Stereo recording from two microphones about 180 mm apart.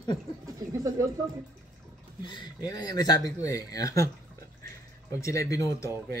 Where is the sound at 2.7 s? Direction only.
20° left (ahead or behind).